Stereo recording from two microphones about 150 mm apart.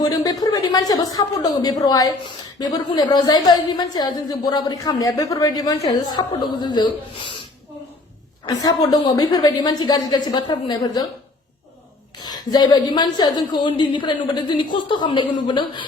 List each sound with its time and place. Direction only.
0.0 s a woman's voice: 25° left (ahead or behind)
8.4 s a woman's voice: 25° left (ahead or behind)
12.2 s a woman's voice: 25° left (ahead or behind)